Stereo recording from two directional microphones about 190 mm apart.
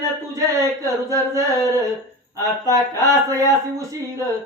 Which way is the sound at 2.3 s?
15° right (ahead or behind).